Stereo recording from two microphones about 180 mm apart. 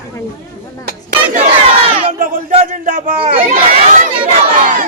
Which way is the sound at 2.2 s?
45° right (ahead or behind).